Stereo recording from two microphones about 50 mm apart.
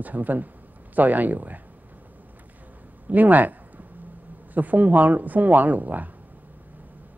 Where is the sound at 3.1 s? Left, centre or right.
Right.